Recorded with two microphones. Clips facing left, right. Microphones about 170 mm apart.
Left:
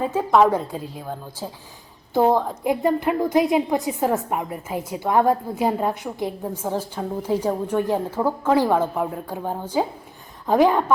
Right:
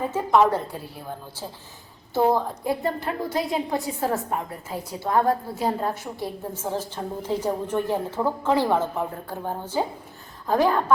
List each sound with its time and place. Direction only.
0.3 s a woman's voice: 15° left (ahead or behind)